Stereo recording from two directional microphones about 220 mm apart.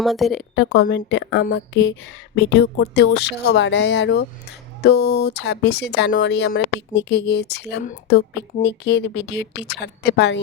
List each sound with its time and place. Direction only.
0.0 s speech: centre (ahead or behind)
0.5 s speech: 50° left (ahead or behind)